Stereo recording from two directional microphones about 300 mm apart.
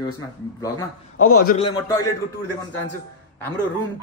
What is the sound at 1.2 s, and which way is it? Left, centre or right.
Speech, left.